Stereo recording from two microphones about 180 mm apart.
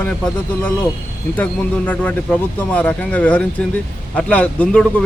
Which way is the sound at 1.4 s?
10° left (ahead or behind).